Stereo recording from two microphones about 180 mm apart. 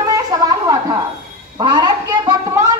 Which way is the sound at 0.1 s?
20° right (ahead or behind).